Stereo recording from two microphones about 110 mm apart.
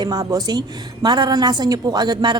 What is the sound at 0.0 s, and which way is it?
A woman's voice, 35° right (ahead or behind).